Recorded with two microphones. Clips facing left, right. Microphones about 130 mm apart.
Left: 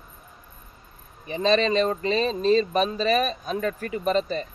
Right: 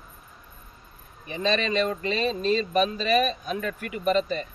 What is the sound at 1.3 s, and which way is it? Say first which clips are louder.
Speech: left 4 dB; 35° left (ahead or behind).